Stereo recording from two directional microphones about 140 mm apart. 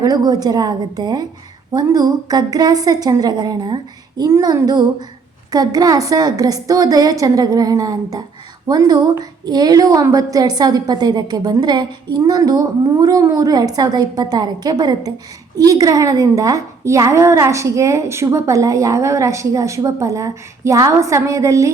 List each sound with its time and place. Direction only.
0.0 s a woman's voice: 25° right (ahead or behind)